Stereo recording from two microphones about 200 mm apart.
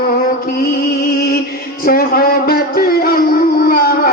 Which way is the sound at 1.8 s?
50° left (ahead or behind).